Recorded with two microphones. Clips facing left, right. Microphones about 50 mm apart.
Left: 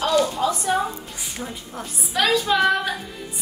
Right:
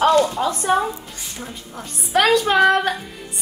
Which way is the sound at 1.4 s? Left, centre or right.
Centre.